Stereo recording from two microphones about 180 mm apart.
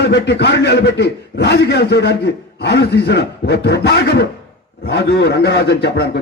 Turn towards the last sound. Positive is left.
turn(degrees=65)  # may be behind; listen again after turning